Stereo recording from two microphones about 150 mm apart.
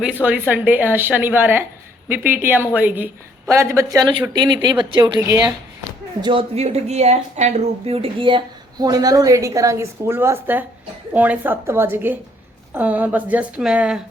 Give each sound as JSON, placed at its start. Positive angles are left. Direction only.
{"t": 0.0, "sound": "speech", "side_deg": -10}
{"t": 6.2, "sound": "speech", "side_deg": -40}